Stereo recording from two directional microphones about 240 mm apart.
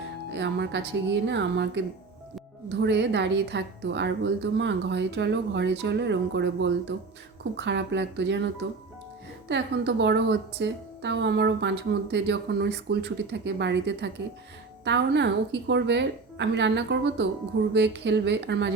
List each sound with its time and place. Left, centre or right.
0.3 s a woman's voice: right
9.5 s a woman's voice: right